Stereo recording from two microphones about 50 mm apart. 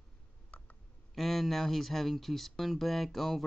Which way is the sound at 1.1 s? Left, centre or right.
Centre.